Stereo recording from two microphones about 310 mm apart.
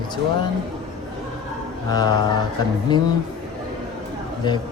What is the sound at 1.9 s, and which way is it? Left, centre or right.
Speech, centre.